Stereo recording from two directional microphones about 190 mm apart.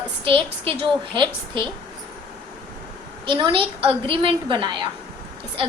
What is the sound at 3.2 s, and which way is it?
A woman's voice, 25° right (ahead or behind).